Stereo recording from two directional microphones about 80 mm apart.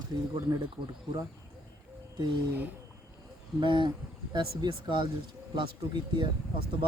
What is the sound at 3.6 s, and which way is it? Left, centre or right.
Speech, right.